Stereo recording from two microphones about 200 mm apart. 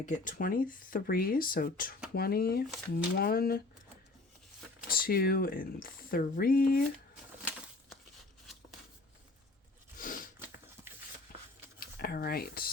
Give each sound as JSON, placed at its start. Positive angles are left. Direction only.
{"t": 0.0, "sound": "speech", "side_deg": 40}
{"t": 4.9, "sound": "speech", "side_deg": 45}
{"t": 11.8, "sound": "speech", "side_deg": 45}